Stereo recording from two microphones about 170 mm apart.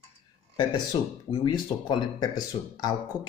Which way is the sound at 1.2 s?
25° left (ahead or behind).